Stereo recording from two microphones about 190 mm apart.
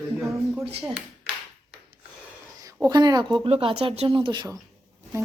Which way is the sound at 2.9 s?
20° right (ahead or behind).